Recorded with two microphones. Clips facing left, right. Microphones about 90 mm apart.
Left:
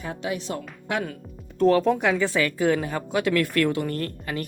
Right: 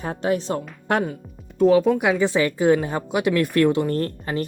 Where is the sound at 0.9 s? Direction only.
50° right (ahead or behind).